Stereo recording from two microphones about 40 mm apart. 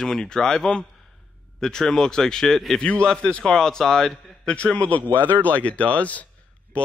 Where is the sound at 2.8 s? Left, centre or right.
Left; by 4.2 s centre.